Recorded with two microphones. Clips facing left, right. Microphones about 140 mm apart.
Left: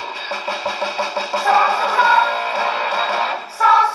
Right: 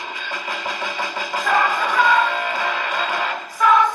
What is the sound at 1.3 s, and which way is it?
Music, 35° left (ahead or behind).